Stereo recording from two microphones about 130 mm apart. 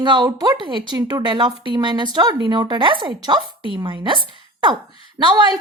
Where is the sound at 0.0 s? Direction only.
35° right (ahead or behind).